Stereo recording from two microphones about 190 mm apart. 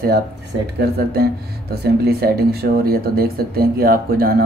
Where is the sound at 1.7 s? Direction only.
55° right (ahead or behind).